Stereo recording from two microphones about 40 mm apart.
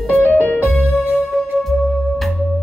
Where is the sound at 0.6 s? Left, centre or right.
Centre.